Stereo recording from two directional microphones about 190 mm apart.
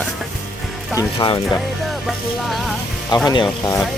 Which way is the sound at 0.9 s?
25° left (ahead or behind).